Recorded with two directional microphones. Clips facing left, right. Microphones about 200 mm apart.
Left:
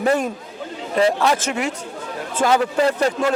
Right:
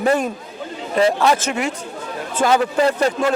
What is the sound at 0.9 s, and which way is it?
A man's voice, 20° right (ahead or behind).